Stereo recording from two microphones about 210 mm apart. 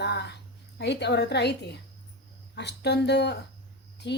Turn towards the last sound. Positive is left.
turn(degrees=55)  # may be behind; listen again after turning